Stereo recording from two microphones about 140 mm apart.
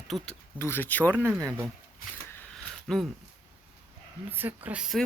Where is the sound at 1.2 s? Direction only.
20° right (ahead or behind).